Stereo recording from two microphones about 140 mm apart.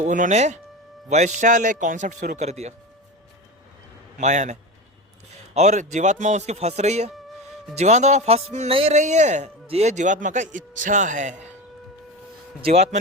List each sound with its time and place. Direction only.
0.0 s speech: 60° right (ahead or behind)
4.2 s speech: 60° right (ahead or behind)
5.5 s speech: 55° right (ahead or behind)